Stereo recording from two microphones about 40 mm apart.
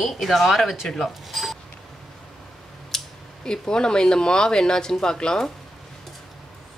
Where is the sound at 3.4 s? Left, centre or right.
Centre.